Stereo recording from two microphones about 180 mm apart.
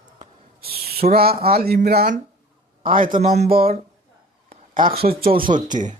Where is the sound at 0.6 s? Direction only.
60° right (ahead or behind).